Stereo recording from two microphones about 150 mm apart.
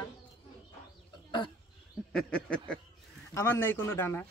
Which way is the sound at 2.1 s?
5° left (ahead or behind).